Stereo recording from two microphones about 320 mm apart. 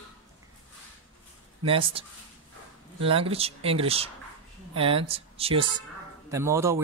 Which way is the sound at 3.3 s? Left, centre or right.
Centre.